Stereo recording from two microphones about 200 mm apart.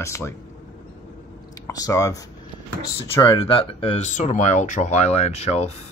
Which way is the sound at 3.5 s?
30° left (ahead or behind).